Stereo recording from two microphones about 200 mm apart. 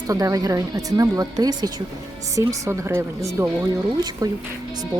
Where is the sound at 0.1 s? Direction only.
15° right (ahead or behind).